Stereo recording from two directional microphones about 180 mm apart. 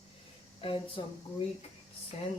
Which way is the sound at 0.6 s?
30° left (ahead or behind).